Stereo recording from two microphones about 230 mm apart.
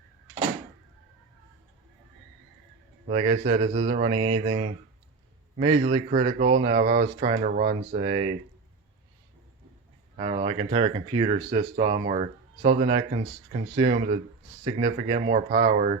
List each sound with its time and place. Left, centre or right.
3.1 s speech: right
10.2 s speech: right